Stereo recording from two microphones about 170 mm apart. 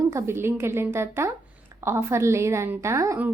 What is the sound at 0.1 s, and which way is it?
A woman's voice, 15° right (ahead or behind).